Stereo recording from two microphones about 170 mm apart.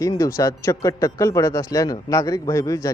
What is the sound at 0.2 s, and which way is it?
Speech, 20° left (ahead or behind).